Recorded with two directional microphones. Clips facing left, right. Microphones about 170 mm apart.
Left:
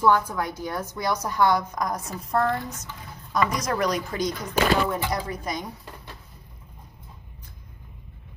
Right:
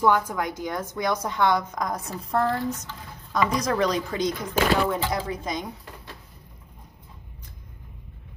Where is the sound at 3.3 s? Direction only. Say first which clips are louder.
Right 1 dB; 25° right (ahead or behind).